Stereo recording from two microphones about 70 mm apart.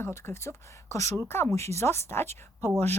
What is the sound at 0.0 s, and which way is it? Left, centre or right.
Speech, left.